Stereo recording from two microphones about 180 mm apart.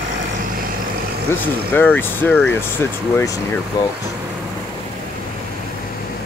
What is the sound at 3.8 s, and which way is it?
Speech, 20° left (ahead or behind).